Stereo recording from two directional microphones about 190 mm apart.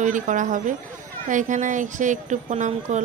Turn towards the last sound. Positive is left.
turn(degrees=-40)  # may be behind; listen again after turning